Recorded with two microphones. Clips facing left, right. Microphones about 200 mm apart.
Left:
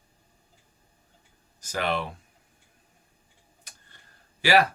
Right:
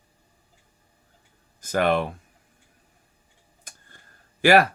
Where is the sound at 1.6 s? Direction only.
50° right (ahead or behind).